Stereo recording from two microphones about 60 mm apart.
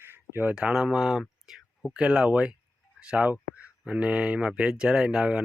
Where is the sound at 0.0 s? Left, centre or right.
Right.